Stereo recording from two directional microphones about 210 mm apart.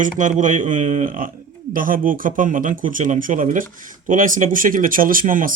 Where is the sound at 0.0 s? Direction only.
35° right (ahead or behind).